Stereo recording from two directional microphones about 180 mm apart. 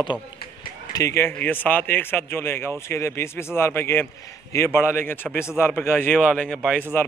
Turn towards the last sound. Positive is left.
turn(degrees=10)  # may be behind; listen again after turning